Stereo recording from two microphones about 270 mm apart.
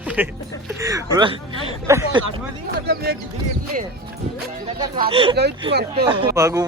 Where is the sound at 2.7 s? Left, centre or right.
Right.